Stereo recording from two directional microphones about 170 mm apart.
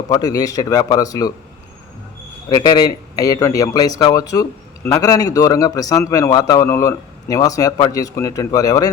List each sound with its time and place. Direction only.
0.1 s speech: 20° left (ahead or behind)
2.5 s speech: 20° left (ahead or behind)